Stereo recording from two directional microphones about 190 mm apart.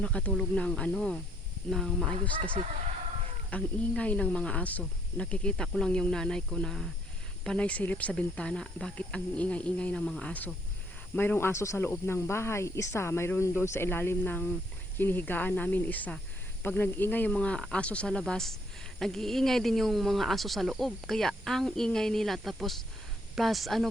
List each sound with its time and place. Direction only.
0.0 s speech: 5° left (ahead or behind)
3.5 s speech: 5° left (ahead or behind)